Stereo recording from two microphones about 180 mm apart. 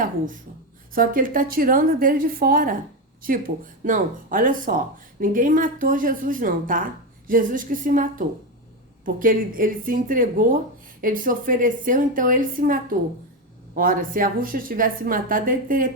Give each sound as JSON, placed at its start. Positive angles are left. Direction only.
{"t": 0.9, "sound": "speech", "side_deg": -50}